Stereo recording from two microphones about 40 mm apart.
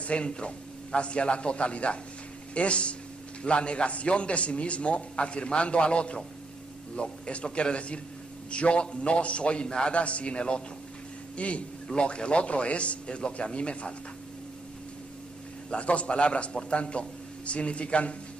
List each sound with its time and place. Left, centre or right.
0.0 s a man's voice: left
15.7 s a man's voice: left